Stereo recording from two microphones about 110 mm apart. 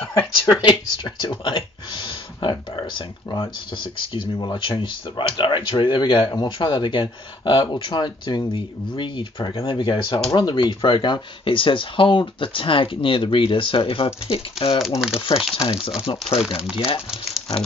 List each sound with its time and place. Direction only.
0.1 s speech: 45° left (ahead or behind)
17.1 s speech: centre (ahead or behind)